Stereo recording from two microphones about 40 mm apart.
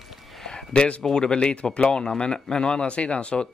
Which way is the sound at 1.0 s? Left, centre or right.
Centre.